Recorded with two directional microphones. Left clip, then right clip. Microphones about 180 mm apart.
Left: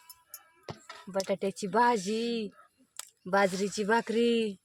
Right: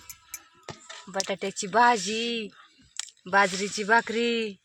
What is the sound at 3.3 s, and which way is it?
Speech, 10° left (ahead or behind).